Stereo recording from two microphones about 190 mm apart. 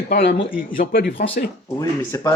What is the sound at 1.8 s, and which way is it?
Speech, 20° left (ahead or behind).